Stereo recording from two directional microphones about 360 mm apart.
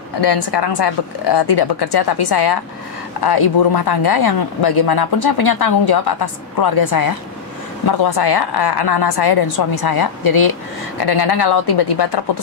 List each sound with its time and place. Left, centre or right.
0.2 s speech: left
6.6 s a woman's voice: left
7.8 s speech: left
11.0 s speech: left